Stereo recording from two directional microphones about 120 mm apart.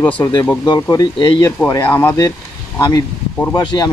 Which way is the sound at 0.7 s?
30° left (ahead or behind).